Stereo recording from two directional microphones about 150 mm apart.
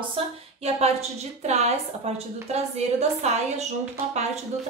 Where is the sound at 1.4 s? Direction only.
45° right (ahead or behind).